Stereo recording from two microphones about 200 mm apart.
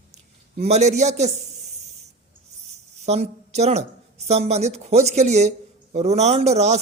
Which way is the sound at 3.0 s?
35° right (ahead or behind).